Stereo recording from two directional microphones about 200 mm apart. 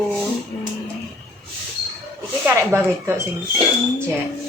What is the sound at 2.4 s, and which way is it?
Speech, 10° right (ahead or behind).